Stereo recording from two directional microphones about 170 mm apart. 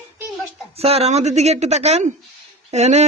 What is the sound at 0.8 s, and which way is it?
A man's voice, 35° right (ahead or behind).